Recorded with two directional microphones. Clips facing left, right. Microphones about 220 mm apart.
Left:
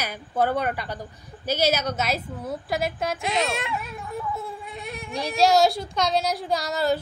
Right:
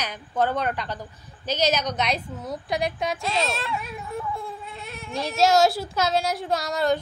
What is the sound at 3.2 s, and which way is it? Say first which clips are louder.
Speech: left 3 dB; 20° left (ahead or behind).